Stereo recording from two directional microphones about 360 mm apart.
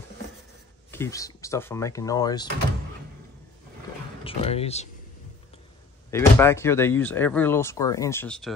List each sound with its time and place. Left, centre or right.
0.9 s speech: centre
4.2 s speech: centre
6.0 s speech: centre